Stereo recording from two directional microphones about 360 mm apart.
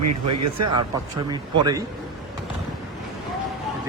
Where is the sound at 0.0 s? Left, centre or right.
Right.